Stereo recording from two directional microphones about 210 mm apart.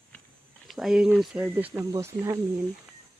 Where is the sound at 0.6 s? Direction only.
Centre (ahead or behind).